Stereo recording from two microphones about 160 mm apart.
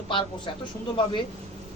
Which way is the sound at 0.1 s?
30° left (ahead or behind).